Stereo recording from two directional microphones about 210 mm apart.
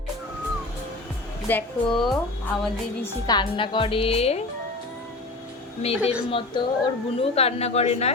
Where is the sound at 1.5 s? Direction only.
5° left (ahead or behind).